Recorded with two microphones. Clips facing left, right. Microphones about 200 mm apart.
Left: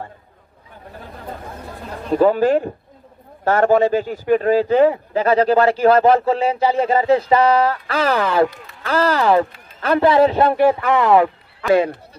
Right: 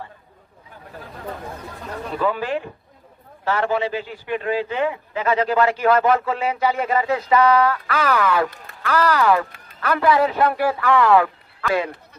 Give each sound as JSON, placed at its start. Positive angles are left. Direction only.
{"t": 2.1, "sound": "a man's voice", "side_deg": 40}